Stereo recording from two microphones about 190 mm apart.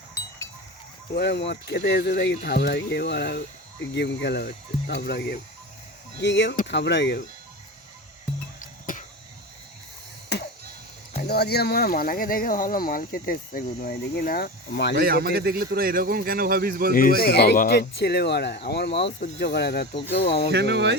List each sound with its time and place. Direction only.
1.1 s speech: 60° left (ahead or behind)
6.2 s speech: 70° left (ahead or behind)
8.5 s music: 45° left (ahead or behind)
10.3 s chop: 60° left (ahead or behind)
11.2 s speech: 55° left (ahead or behind)
14.9 s speech: 55° right (ahead or behind)
16.9 s speech: 50° left (ahead or behind); by 20.3 s 65° left (ahead or behind)
20.5 s speech: 60° right (ahead or behind)